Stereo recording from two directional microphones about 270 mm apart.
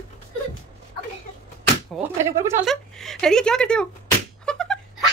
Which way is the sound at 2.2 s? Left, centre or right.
Centre.